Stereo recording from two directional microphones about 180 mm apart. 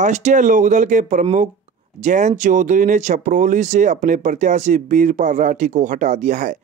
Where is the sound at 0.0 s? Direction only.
40° right (ahead or behind).